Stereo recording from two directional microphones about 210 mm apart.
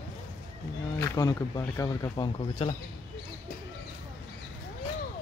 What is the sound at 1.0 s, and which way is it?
Speech, 15° left (ahead or behind).